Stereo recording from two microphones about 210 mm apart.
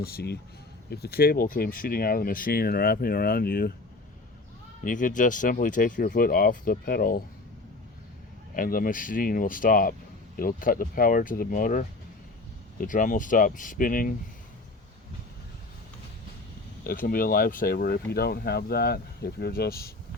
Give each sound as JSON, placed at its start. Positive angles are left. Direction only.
{"t": 0.0, "sound": "speech", "side_deg": 50}
{"t": 4.8, "sound": "speech", "side_deg": 40}
{"t": 8.5, "sound": "speech", "side_deg": 40}
{"t": 16.8, "sound": "speech", "side_deg": 45}